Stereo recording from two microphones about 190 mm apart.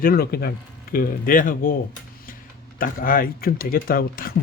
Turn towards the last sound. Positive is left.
turn(degrees=50)  # may be behind; listen again after turning